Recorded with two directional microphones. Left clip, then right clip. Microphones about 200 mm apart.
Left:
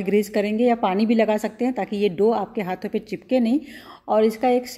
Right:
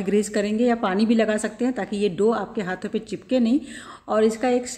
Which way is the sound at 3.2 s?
30° right (ahead or behind).